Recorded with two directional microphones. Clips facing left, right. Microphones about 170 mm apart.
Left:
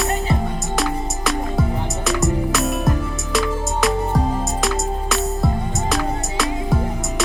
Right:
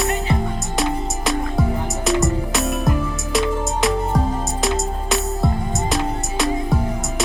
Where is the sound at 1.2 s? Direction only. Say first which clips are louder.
Even; centre (ahead or behind).